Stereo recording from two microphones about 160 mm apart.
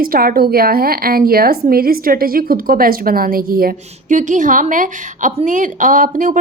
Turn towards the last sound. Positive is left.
turn(degrees=-55)  # may be behind; listen again after turning